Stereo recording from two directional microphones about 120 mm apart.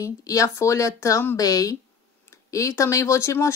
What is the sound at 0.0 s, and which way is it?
Speech, 30° left (ahead or behind).